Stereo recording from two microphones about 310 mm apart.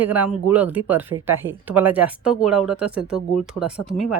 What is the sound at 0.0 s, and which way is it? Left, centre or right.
Speech, centre.